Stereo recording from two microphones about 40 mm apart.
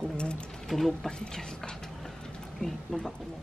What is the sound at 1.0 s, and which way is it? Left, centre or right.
Speech, centre.